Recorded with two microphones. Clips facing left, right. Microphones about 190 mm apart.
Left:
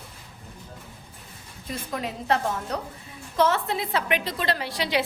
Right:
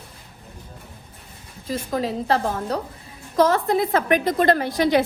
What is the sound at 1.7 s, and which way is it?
A woman's voice, 35° right (ahead or behind).